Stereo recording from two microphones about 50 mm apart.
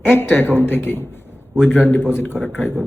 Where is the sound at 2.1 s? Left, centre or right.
Left.